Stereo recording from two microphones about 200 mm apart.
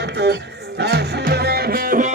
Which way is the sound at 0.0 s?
60° right (ahead or behind).